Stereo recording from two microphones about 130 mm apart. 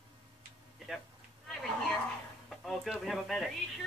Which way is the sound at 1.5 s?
Centre (ahead or behind).